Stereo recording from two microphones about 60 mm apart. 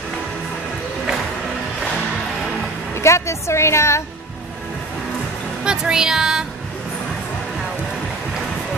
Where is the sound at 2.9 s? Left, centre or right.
Left.